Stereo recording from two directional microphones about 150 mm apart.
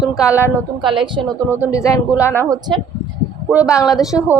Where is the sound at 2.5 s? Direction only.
25° right (ahead or behind).